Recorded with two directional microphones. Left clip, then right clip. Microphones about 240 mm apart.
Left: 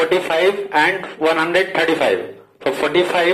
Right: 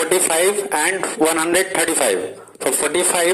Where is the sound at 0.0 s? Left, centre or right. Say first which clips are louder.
Left 2 dB; right.